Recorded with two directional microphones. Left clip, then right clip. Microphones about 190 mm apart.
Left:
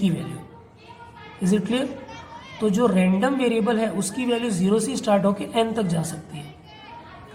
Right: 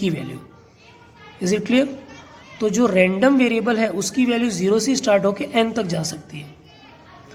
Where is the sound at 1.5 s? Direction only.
45° right (ahead or behind).